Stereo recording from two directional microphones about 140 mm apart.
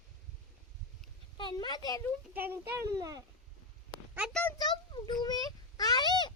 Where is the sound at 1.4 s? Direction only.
35° left (ahead or behind).